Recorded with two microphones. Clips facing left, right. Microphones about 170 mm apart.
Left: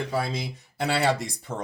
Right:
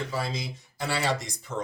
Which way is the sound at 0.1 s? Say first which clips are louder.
Left 3 dB; 55° left (ahead or behind).